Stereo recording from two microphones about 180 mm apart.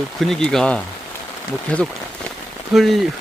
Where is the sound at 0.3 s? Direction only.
5° left (ahead or behind).